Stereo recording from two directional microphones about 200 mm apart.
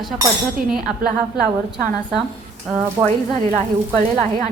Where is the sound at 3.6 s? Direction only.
35° right (ahead or behind).